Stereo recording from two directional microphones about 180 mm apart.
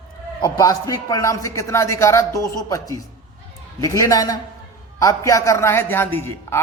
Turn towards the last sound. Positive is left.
turn(degrees=10)  # may be behind; listen again after turning